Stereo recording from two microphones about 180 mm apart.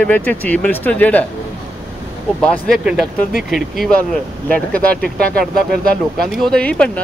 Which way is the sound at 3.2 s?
50° left (ahead or behind).